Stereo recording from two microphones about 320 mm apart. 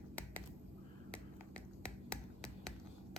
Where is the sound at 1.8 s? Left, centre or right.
Centre.